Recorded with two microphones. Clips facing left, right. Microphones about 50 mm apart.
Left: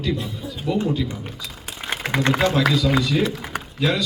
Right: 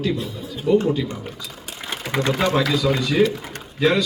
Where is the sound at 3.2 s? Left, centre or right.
Centre.